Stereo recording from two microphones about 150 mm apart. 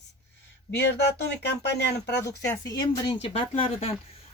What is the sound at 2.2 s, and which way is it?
Speech, 20° left (ahead or behind).